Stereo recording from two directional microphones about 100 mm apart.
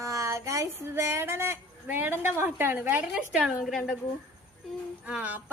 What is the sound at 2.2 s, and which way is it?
A woman's voice, 20° right (ahead or behind).